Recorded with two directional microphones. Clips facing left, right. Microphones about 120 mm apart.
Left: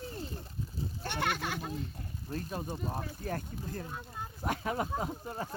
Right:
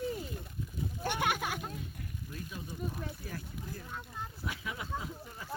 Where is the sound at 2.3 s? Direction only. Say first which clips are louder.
Left 8 dB; 50° left (ahead or behind).